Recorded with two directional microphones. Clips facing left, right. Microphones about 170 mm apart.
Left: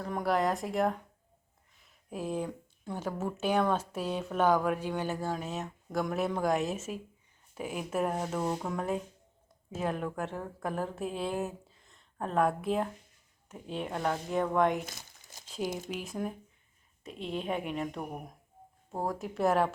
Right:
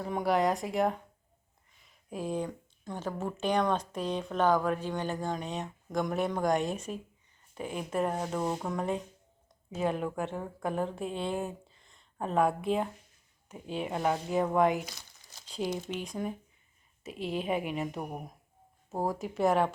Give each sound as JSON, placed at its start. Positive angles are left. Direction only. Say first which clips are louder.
{"t": 0.0, "sound": "speech", "louder": "right 2 dB", "side_deg": 0}
{"t": 14.8, "sound": "crumpling", "louder": "left 1 dB", "side_deg": 50}
{"t": 15.4, "sound": "speech", "louder": "right 1 dB", "side_deg": 5}